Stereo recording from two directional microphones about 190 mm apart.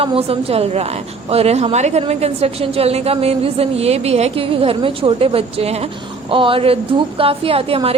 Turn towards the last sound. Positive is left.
turn(degrees=-30)  # may be behind; listen again after turning